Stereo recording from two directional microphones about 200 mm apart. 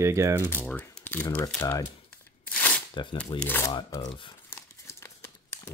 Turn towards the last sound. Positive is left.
turn(degrees=15)  # may be behind; listen again after turning